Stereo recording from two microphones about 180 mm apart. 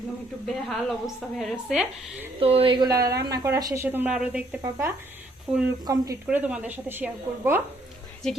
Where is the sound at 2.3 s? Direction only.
30° right (ahead or behind).